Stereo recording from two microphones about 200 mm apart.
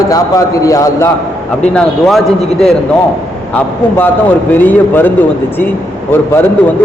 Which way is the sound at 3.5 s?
10° left (ahead or behind).